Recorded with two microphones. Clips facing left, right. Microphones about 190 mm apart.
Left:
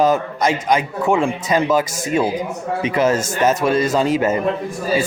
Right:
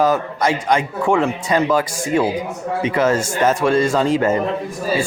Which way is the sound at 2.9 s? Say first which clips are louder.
Even; 20° left (ahead or behind).